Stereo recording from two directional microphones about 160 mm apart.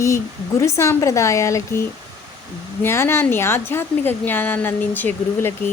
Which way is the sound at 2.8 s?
15° left (ahead or behind).